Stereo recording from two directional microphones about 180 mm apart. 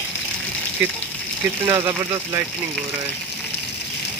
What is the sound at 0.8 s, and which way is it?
Speech, 10° right (ahead or behind).